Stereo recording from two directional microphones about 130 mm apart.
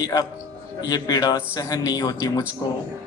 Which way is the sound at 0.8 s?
30° left (ahead or behind).